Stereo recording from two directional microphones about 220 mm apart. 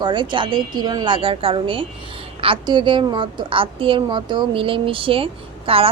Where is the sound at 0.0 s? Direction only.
20° right (ahead or behind).